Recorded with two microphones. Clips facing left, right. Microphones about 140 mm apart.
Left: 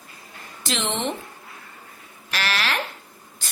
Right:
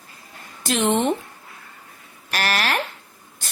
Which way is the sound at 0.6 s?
50° right (ahead or behind).